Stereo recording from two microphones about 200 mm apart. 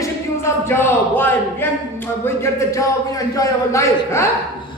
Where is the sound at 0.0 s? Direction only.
10° left (ahead or behind).